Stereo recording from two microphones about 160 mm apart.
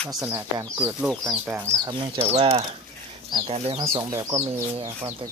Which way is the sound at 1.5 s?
15° right (ahead or behind).